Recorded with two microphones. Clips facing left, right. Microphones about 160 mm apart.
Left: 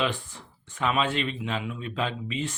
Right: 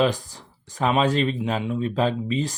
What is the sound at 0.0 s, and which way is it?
Speech, 40° right (ahead or behind).